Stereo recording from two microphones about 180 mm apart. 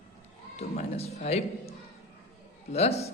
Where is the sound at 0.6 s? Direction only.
35° left (ahead or behind).